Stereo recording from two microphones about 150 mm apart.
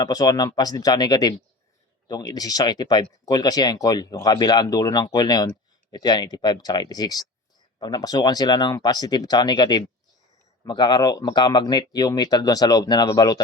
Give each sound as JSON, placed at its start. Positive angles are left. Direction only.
{"t": 0.0, "sound": "speech", "side_deg": 25}